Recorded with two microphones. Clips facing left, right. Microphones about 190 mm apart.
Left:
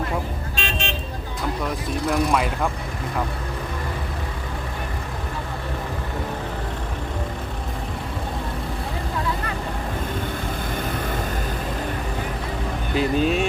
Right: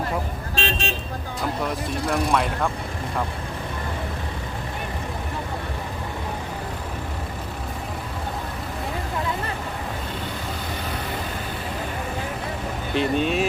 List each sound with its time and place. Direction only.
0.5 s vehicle: 40° right (ahead or behind)
1.9 s speech: centre (ahead or behind)
12.9 s speech: centre (ahead or behind)